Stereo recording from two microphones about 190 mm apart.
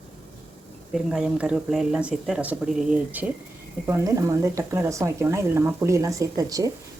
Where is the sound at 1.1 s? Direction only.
5° right (ahead or behind).